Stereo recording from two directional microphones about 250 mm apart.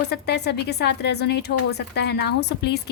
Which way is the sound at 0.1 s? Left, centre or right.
Left.